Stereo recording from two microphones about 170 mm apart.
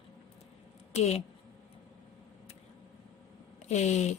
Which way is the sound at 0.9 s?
40° left (ahead or behind).